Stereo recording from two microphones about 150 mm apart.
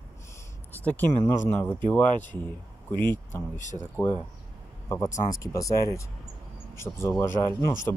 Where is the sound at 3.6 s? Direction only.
55° left (ahead or behind).